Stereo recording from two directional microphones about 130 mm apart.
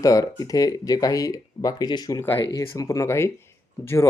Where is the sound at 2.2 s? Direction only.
20° left (ahead or behind).